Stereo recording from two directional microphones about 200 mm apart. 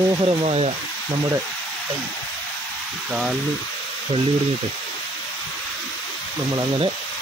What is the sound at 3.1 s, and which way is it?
Speech, 5° right (ahead or behind).